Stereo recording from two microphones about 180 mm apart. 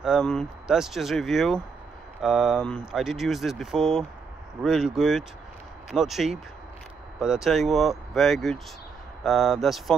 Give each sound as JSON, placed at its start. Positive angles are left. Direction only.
{"t": 0.0, "sound": "speech", "side_deg": 0}